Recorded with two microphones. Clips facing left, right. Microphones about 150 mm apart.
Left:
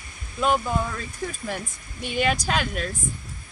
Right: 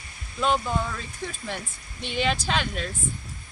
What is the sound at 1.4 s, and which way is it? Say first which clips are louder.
Speech: left 3 dB; 10° left (ahead or behind).